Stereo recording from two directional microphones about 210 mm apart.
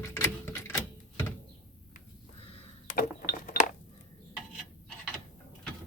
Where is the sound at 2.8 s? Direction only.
40° left (ahead or behind).